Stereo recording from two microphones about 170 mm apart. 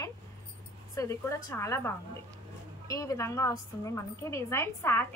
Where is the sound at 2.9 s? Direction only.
20° left (ahead or behind).